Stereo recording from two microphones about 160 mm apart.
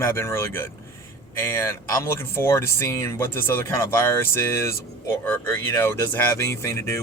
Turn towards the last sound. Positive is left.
turn(degrees=15)  # may be behind; listen again after turning